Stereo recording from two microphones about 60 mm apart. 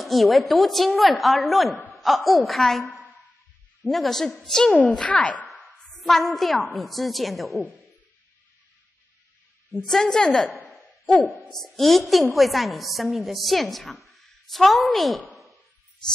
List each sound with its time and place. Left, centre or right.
0.0 s a woman's voice: centre
3.8 s a woman's voice: centre
5.5 s a sound: centre
6.7 s a woman's voice: centre
9.8 s a woman's voice: centre
10.6 s a sound: centre
11.5 s a woman's voice: centre